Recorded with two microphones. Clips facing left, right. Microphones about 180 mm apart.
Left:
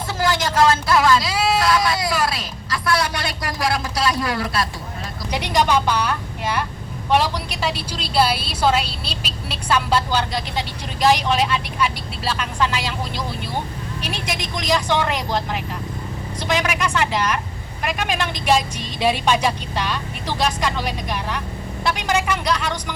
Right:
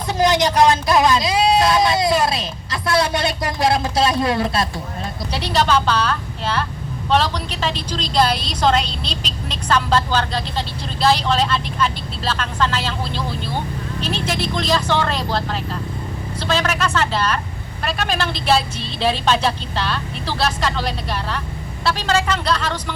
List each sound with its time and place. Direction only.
0.1 s speech: 20° right (ahead or behind)
5.3 s a woman's voice: 15° left (ahead or behind)